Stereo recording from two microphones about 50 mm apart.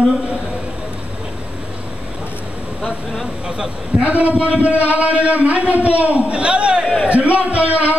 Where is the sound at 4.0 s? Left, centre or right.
Right.